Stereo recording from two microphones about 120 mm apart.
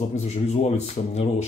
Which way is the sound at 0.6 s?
65° left (ahead or behind).